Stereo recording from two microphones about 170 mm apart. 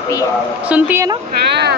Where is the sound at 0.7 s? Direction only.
10° right (ahead or behind).